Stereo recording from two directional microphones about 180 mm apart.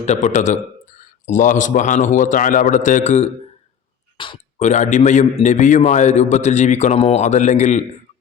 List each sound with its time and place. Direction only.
0.0 s speech: 40° left (ahead or behind)
4.2 s a sound: 30° left (ahead or behind)
4.6 s a man's voice: 40° left (ahead or behind)